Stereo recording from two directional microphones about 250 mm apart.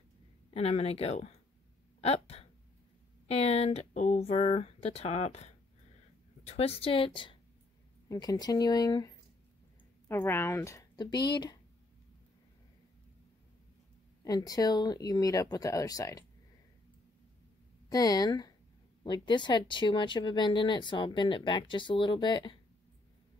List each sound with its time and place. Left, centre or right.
0.5 s speech: left
2.0 s a sound: left
3.3 s a woman's voice: left
14.2 s speech: centre
17.8 s speech: centre